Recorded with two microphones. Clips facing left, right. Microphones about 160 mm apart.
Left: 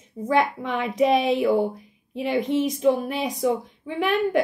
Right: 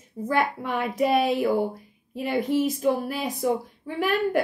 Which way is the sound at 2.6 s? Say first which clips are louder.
Even; 5° right (ahead or behind).